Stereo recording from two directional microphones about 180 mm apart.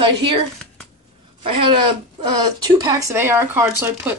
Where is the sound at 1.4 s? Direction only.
30° right (ahead or behind).